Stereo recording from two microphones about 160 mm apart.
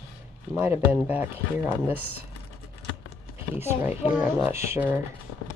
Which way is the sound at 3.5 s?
15° right (ahead or behind).